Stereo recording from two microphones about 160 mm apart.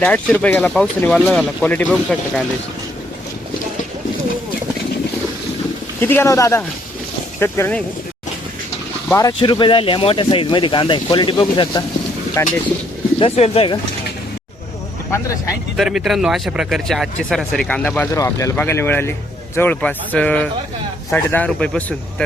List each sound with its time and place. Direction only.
0.0 s speech: 10° left (ahead or behind)
6.0 s speech: 15° left (ahead or behind)
9.0 s speech: 20° left (ahead or behind)
9.4 s speech: 30° left (ahead or behind)
12.4 s speech: 20° left (ahead or behind)
13.1 s speech: 40° left (ahead or behind)
15.1 s speech: 20° left (ahead or behind)
15.7 s speech: centre (ahead or behind)